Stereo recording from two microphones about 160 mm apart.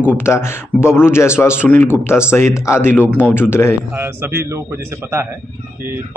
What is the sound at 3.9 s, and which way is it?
Speech, 10° right (ahead or behind).